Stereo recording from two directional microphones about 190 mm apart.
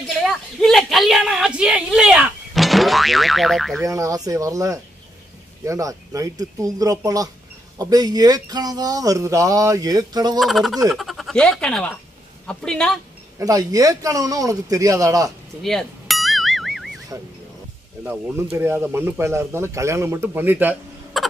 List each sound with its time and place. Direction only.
0.2 s a woman's voice: centre (ahead or behind)
3.8 s speech: 15° right (ahead or behind)
10.4 s a woman's voice: centre (ahead or behind)
13.4 s speech: 20° right (ahead or behind)
15.6 s music: centre (ahead or behind)
18.0 s speech: 10° right (ahead or behind)